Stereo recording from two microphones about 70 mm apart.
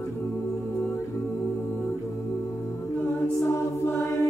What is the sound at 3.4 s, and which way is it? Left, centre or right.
Choir, left.